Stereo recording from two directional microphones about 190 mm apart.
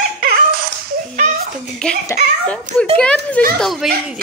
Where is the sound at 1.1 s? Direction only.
45° right (ahead or behind).